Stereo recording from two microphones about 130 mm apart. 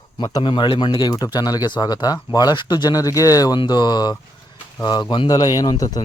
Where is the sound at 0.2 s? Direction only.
35° left (ahead or behind).